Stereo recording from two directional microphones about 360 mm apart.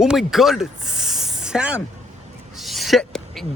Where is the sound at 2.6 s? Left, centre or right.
Centre.